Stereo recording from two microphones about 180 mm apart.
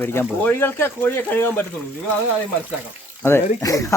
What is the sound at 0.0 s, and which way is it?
Speech, 10° left (ahead or behind).